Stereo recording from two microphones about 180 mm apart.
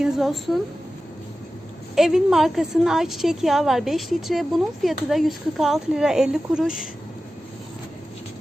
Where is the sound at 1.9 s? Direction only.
Centre (ahead or behind).